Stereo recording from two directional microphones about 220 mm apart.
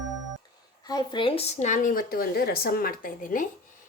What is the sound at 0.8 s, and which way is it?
A woman's voice, 20° left (ahead or behind).